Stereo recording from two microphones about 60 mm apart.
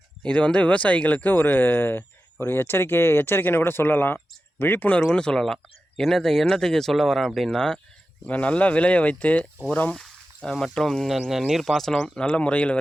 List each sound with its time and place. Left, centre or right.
0.2 s speech: centre; by 4.9 s left
4.9 s speech: centre
8.2 s speech: left
9.9 s a sound: centre
10.5 s speech: centre
11.1 s speech: centre; by 12.8 s left